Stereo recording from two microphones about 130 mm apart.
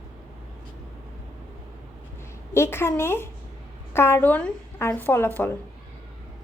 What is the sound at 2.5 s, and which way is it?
A woman's voice, 20° left (ahead or behind).